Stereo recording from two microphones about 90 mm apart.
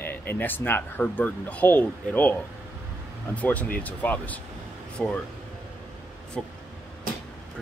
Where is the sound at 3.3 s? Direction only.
15° left (ahead or behind).